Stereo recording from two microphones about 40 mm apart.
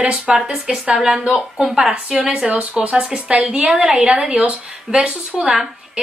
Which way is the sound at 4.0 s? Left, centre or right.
Right.